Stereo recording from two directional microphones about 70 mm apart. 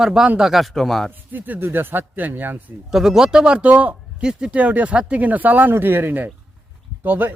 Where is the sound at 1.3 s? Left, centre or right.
Right.